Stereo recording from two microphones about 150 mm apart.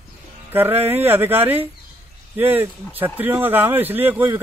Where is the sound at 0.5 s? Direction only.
15° right (ahead or behind).